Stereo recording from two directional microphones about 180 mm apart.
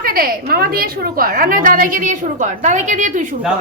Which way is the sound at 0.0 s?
55° right (ahead or behind).